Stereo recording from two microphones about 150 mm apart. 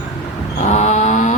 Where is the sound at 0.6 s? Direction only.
50° left (ahead or behind).